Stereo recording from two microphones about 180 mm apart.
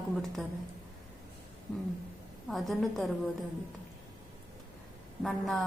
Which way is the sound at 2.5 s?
Centre (ahead or behind).